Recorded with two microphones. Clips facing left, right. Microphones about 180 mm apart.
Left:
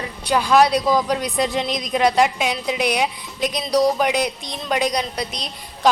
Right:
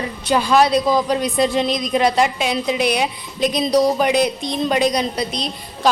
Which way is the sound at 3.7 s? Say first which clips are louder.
Right 1 dB; 5° right (ahead or behind).